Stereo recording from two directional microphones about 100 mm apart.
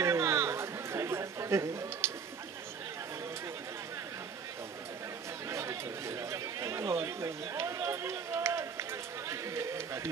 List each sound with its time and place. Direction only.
0.0 s chatter: 30° right (ahead or behind)
5.5 s chatter: 30° right (ahead or behind)
9.3 s a sound: 30° right (ahead or behind)